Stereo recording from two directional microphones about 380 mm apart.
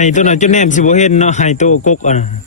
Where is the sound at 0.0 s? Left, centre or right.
Centre.